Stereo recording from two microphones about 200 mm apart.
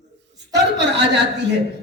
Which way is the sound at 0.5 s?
60° right (ahead or behind).